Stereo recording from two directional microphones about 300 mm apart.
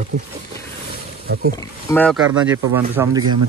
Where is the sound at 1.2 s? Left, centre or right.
Right.